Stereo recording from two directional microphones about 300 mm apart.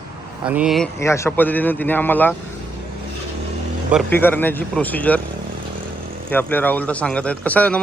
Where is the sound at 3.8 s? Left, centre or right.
Centre.